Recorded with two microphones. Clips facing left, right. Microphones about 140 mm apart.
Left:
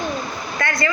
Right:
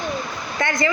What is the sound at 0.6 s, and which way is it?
Speech, 20° right (ahead or behind).